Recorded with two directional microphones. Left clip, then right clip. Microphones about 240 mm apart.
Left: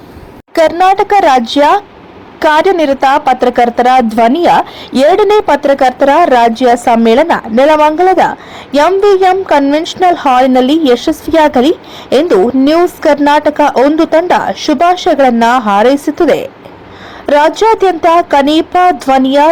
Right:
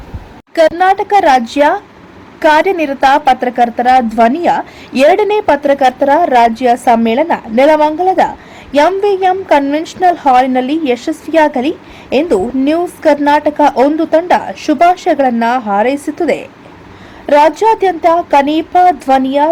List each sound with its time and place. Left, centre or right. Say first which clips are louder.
0.5 s a woman's voice: left 2 dB; centre